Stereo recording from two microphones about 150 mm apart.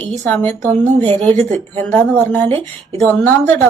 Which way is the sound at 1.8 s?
10° left (ahead or behind).